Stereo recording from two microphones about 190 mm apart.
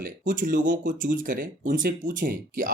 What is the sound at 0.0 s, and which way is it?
Speech, 45° right (ahead or behind).